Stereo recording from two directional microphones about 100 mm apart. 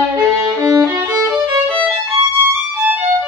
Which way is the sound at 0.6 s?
35° right (ahead or behind).